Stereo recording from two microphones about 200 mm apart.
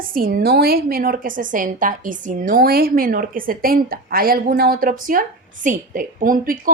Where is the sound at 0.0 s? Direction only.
45° right (ahead or behind).